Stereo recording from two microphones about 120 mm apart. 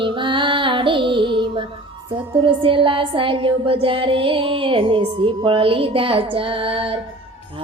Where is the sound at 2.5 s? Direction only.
45° right (ahead or behind).